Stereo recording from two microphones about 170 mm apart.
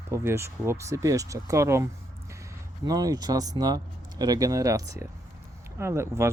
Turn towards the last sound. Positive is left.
turn(degrees=-15)  # may be behind; listen again after turning